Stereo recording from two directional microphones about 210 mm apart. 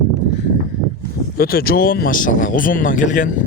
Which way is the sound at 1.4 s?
45° left (ahead or behind).